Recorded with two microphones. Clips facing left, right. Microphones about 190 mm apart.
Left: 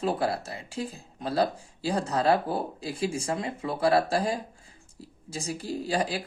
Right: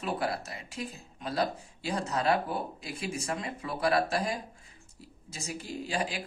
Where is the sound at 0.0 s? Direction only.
30° left (ahead or behind).